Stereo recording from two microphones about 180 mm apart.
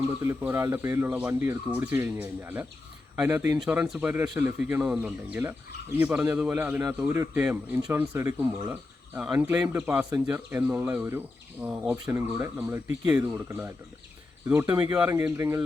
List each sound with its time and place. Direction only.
0.2 s speech: 15° right (ahead or behind)